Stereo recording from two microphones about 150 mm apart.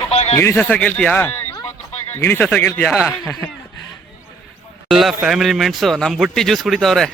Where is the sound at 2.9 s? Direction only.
Centre (ahead or behind).